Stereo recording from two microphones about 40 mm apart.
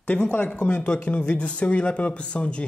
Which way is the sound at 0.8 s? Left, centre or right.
Left.